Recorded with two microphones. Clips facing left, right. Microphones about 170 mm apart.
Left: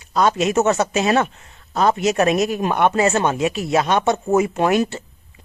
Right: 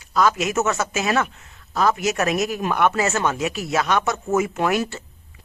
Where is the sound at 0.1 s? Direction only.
25° left (ahead or behind).